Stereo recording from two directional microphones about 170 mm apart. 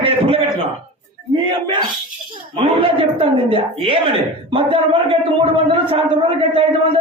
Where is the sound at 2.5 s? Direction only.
30° right (ahead or behind).